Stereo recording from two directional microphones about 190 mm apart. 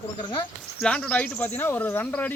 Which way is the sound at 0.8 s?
5° left (ahead or behind).